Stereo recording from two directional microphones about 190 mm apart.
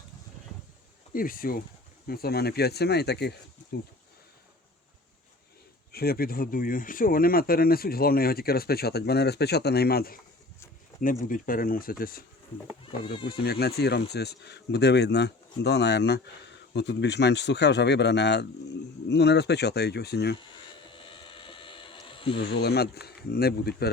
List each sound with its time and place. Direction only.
1.1 s speech: 50° left (ahead or behind)
5.9 s speech: 55° left (ahead or behind)
13.2 s speech: 55° left (ahead or behind)
20.9 s a sound: 25° left (ahead or behind)
22.4 s speech: 60° left (ahead or behind)